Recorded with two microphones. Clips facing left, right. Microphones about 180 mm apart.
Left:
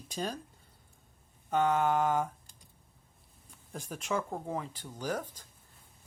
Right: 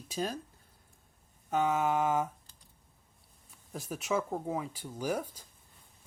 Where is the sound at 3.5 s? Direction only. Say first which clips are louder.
Right 2 dB; 5° right (ahead or behind).